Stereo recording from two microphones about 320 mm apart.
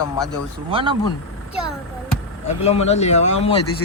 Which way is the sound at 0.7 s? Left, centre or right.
Centre.